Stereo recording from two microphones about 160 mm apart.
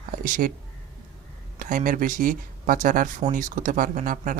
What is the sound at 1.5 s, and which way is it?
Speech, 55° right (ahead or behind).